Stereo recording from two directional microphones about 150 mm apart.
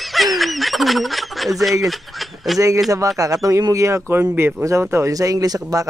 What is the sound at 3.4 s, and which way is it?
Speech, 20° right (ahead or behind).